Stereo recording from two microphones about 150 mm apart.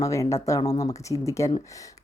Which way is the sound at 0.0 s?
20° left (ahead or behind).